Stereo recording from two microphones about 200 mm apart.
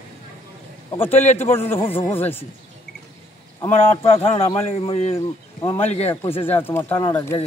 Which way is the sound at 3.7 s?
30° left (ahead or behind).